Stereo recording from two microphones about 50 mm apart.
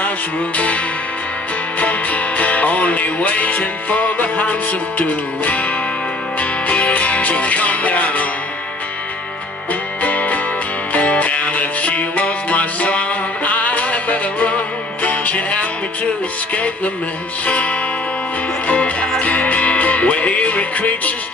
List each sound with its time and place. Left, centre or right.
0.6 s music: left
10.0 s music: left